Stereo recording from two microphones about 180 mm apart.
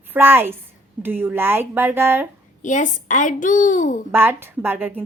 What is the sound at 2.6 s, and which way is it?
A woman's voice, 45° left (ahead or behind).